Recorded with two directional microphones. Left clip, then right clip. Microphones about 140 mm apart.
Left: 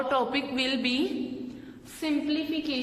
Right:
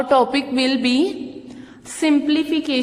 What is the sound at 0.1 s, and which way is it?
A woman's voice, 40° right (ahead or behind).